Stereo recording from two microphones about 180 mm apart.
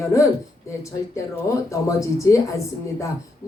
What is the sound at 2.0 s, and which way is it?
Speech, 15° left (ahead or behind).